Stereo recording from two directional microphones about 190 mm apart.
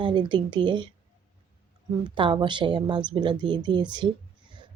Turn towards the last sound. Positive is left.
turn(degrees=-25)  # may be behind; listen again after turning